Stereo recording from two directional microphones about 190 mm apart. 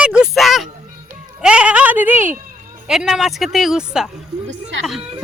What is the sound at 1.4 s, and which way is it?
Speech, 5° right (ahead or behind).